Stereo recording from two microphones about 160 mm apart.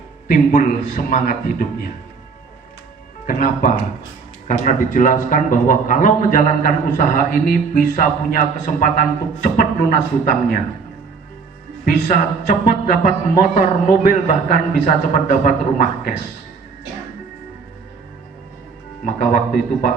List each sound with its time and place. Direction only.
0.3 s a man's voice: 55° left (ahead or behind)
3.2 s a man's voice: 55° left (ahead or behind)
12.0 s a man's voice: 55° left (ahead or behind)
19.0 s a man's voice: 55° left (ahead or behind)